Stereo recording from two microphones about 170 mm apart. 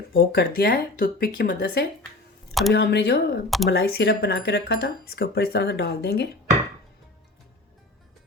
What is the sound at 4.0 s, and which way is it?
Speech, 75° left (ahead or behind).